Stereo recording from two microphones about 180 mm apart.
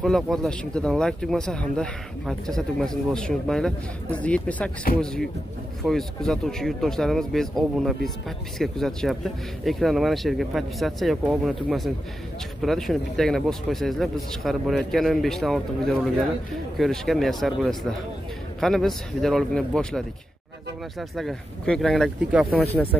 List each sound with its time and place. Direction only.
0.0 s speech: centre (ahead or behind)
4.9 s a man's voice: 55° left (ahead or behind)
5.8 s speech: centre (ahead or behind)
21.2 s speech: 5° left (ahead or behind)